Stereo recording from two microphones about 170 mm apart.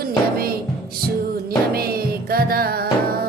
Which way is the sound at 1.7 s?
65° right (ahead or behind).